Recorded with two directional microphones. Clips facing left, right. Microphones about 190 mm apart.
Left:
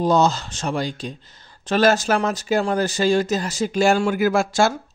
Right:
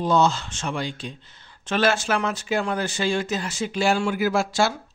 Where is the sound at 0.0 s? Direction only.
40° left (ahead or behind).